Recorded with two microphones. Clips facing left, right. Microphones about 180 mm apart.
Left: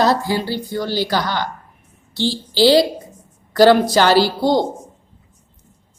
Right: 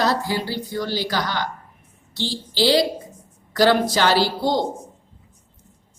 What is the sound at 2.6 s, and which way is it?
A woman's voice, 30° left (ahead or behind).